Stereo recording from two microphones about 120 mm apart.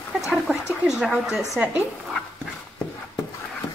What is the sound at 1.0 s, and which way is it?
Speech, 5° right (ahead or behind).